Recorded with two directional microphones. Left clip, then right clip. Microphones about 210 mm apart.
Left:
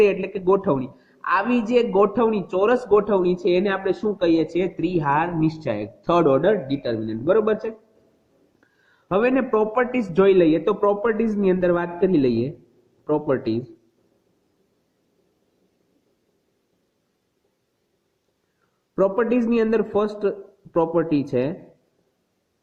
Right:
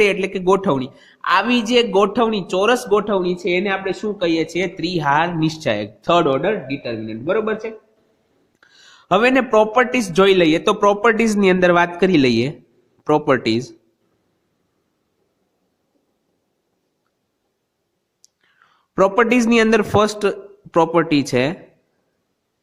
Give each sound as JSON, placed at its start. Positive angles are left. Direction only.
{"t": 0.0, "sound": "a man's voice", "side_deg": -35}
{"t": 3.4, "sound": "a man's voice", "side_deg": -10}
{"t": 4.2, "sound": "speech", "side_deg": -20}
{"t": 6.2, "sound": "a man's voice", "side_deg": -10}
{"t": 8.6, "sound": "a man's voice", "side_deg": -35}
{"t": 18.9, "sound": "a man's voice", "side_deg": -40}